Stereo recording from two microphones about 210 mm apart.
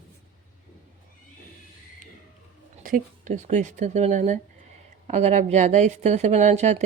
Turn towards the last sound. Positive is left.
turn(degrees=-35)  # may be behind; listen again after turning